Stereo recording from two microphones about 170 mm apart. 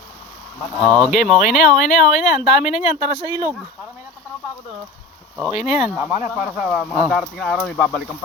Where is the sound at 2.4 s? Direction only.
40° left (ahead or behind).